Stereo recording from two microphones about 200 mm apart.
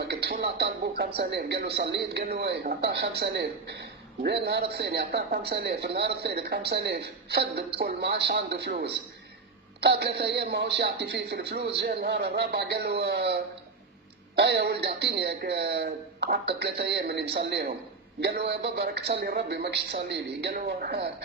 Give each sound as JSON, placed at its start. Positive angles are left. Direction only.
{"t": 0.0, "sound": "speech", "side_deg": -55}